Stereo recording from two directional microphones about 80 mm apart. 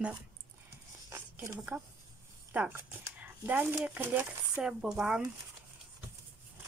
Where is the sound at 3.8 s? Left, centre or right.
Centre.